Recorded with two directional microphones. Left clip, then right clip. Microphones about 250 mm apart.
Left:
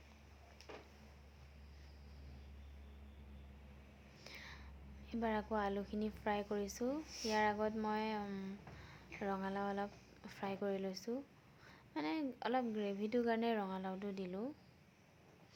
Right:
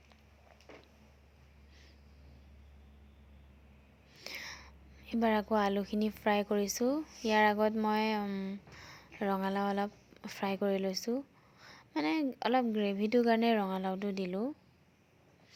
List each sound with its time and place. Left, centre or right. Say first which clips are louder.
4.2 s a woman's voice: right 10 dB; right